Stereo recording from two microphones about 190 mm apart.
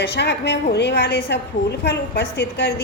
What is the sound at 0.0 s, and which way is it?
A woman's voice, 60° left (ahead or behind).